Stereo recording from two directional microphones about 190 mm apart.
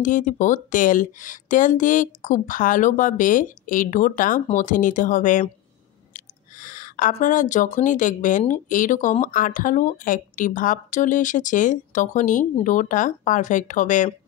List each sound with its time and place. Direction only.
0.0 s speech: 40° left (ahead or behind)